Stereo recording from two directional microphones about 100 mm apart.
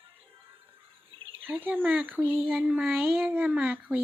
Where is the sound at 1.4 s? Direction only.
20° right (ahead or behind).